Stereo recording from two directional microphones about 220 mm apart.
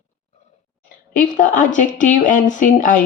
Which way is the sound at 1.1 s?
35° left (ahead or behind).